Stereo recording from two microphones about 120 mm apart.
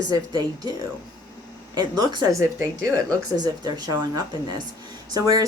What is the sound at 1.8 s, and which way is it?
A woman's voice, 35° right (ahead or behind).